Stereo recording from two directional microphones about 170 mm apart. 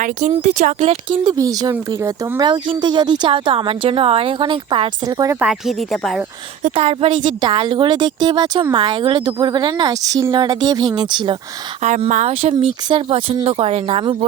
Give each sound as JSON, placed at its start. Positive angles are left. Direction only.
{"t": 0.0, "sound": "speech", "side_deg": -45}
{"t": 1.2, "sound": "speech", "side_deg": -20}
{"t": 5.4, "sound": "speech", "side_deg": -5}
{"t": 6.6, "sound": "speech", "side_deg": -35}
{"t": 11.8, "sound": "speech", "side_deg": -40}